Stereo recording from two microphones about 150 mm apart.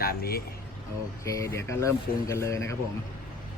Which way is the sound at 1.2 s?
20° left (ahead or behind).